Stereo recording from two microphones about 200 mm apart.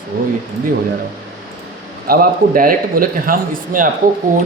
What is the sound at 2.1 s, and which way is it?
A man's voice, 45° right (ahead or behind).